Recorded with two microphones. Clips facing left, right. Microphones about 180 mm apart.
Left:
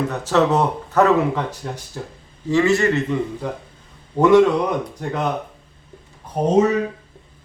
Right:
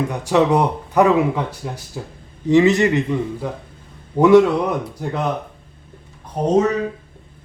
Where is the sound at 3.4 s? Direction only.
5° right (ahead or behind).